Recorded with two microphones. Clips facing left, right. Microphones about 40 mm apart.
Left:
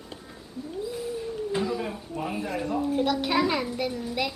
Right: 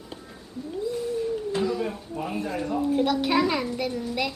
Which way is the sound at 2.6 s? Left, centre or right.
Centre.